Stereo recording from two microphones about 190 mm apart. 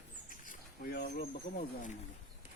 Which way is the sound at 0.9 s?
50° left (ahead or behind).